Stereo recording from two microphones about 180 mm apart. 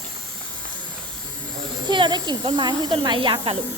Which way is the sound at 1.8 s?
25° right (ahead or behind).